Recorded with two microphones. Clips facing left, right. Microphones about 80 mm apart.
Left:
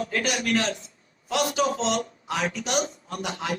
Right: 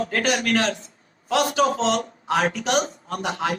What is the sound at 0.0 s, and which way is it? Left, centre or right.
A man's voice, right.